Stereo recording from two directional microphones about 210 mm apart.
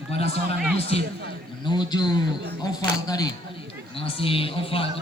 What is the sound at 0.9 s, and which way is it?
A man's voice, 30° left (ahead or behind).